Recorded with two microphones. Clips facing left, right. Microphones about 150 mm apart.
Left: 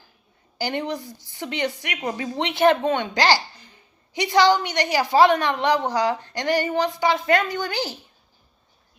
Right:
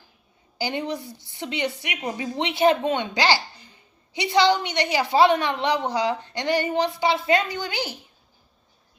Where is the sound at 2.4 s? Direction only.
55° left (ahead or behind).